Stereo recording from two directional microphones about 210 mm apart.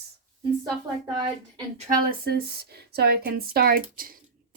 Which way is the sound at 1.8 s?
45° right (ahead or behind).